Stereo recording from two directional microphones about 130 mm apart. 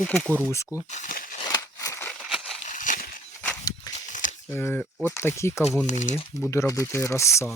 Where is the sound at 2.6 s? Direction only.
80° left.